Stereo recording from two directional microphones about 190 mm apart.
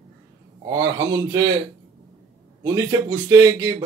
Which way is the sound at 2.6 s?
15° right (ahead or behind).